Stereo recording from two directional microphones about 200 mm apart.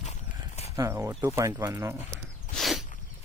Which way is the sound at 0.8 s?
15° right (ahead or behind).